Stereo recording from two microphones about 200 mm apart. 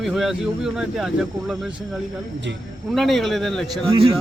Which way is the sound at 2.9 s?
Centre (ahead or behind).